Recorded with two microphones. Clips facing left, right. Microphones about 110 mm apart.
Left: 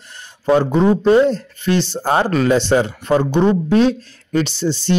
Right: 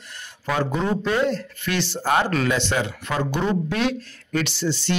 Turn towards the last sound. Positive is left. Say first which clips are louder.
# left 5 dB
turn(degrees=30)  # may be behind; listen again after turning